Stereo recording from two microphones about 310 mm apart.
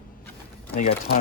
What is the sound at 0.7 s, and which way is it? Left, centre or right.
Speech, left.